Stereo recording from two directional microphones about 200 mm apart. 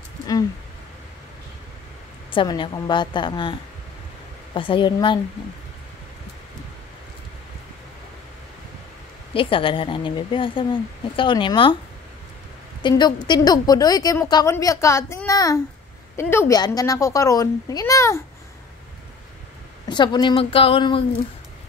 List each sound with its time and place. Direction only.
2.3 s a woman's voice: 25° left (ahead or behind)
4.6 s a woman's voice: 25° left (ahead or behind)
9.3 s a woman's voice: 25° left (ahead or behind)
12.8 s speech: 20° left (ahead or behind)
19.9 s a woman's voice: 20° left (ahead or behind)